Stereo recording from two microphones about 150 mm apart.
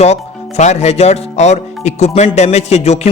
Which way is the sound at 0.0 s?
50° left (ahead or behind).